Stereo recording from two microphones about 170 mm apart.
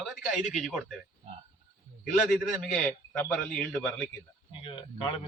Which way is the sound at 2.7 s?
5° left (ahead or behind).